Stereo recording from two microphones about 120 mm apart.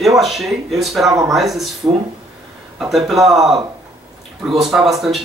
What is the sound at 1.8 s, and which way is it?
Speech, 25° right (ahead or behind).